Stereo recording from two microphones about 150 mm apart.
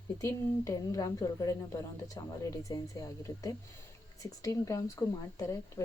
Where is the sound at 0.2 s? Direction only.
20° left (ahead or behind).